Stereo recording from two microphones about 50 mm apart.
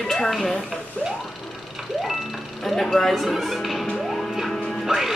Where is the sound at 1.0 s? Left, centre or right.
Left.